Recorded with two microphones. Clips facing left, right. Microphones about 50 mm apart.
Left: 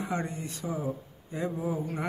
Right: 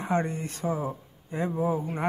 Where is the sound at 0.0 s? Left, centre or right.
Right.